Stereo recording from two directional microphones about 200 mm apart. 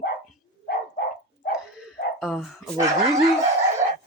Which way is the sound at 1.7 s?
5° right (ahead or behind).